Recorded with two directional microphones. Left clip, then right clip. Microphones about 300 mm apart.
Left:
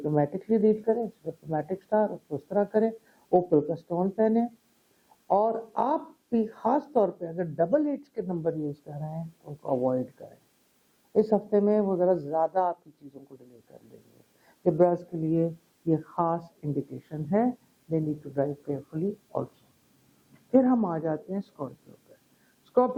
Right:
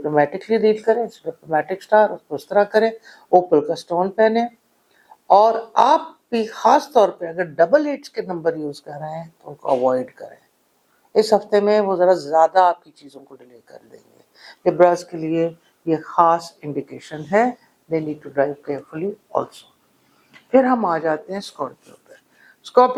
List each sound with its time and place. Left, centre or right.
0.0 s speech: centre
3.2 s a woman's voice: centre
13.1 s speech: centre